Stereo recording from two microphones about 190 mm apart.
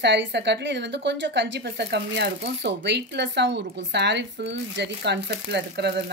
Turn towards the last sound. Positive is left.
turn(degrees=-60)  # may be behind; listen again after turning